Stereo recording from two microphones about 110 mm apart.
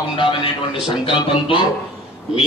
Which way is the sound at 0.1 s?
50° left (ahead or behind).